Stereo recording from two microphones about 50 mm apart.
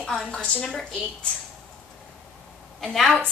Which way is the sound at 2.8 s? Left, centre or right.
Centre.